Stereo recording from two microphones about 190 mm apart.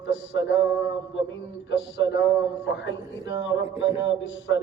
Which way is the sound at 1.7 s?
70° left (ahead or behind).